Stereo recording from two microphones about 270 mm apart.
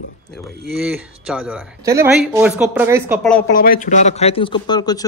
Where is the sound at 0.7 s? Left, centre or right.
Centre.